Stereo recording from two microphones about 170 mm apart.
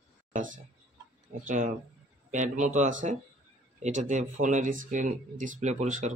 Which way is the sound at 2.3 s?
45° right (ahead or behind).